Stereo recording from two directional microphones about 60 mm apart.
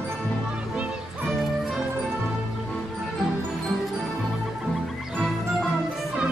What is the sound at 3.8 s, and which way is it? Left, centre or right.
Music, centre.